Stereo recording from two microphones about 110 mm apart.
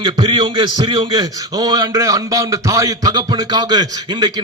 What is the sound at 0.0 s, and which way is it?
A man's voice, 40° right (ahead or behind).